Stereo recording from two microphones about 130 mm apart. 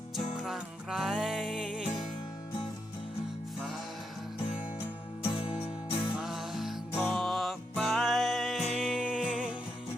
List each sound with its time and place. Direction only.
0.3 s music: 5° right (ahead or behind)
4.8 s music: 45° left (ahead or behind)
6.1 s music: 5° right (ahead or behind)